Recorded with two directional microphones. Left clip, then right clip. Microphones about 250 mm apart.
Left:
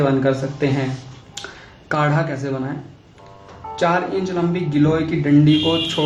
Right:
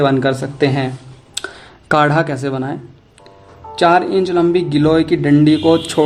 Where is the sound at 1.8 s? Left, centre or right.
Right.